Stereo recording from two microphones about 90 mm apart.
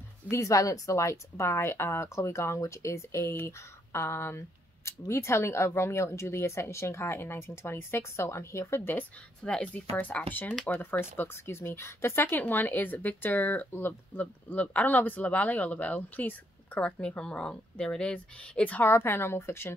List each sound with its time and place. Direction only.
0.3 s a woman's voice: 40° left (ahead or behind)
9.4 s speech: 10° left (ahead or behind)
18.9 s speech: 25° left (ahead or behind)